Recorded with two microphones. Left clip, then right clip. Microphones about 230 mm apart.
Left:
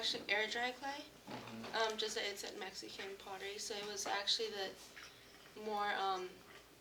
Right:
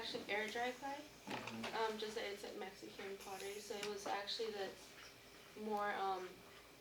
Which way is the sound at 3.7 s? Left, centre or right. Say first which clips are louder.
Left 2 dB; left.